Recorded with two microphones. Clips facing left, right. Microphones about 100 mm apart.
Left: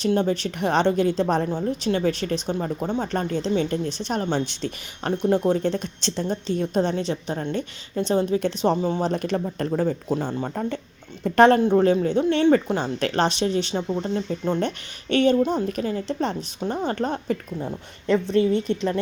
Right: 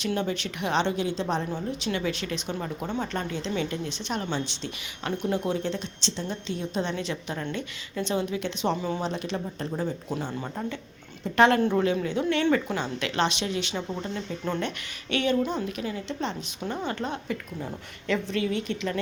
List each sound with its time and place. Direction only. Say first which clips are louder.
0.0 s a woman's voice: left 7 dB; 35° left (ahead or behind)